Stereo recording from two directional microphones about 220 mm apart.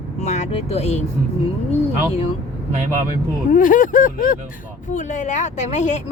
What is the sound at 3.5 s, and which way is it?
Speech, 35° left (ahead or behind).